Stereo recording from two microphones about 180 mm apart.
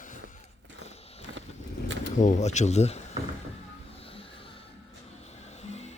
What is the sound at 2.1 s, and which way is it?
Speech, 45° left (ahead or behind).